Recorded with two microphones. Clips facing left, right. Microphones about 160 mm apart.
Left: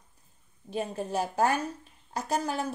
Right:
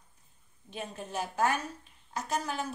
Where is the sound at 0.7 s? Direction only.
35° left (ahead or behind).